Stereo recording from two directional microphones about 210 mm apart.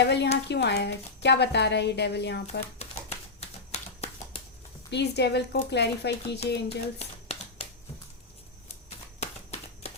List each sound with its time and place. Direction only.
0.0 s a woman's voice: 55° left (ahead or behind)
2.5 s typewriter: 30° left (ahead or behind)
3.7 s a sound: 30° left (ahead or behind)
4.9 s a woman's voice: 55° left (ahead or behind)
6.7 s speech: 30° left (ahead or behind)
9.2 s a sound: 30° left (ahead or behind)